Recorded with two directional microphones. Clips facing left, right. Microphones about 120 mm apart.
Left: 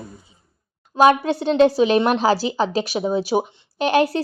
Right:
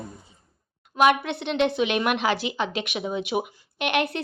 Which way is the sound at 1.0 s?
35° left (ahead or behind).